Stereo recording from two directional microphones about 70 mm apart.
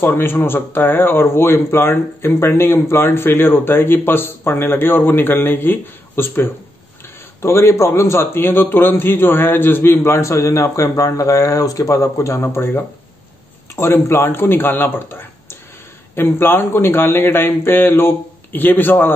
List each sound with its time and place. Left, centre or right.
0.0 s speech: left
12.4 s speech: left